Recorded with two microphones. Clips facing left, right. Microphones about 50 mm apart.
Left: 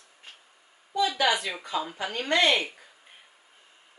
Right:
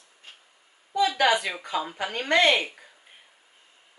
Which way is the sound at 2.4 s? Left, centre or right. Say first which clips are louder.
Right 2 dB; centre.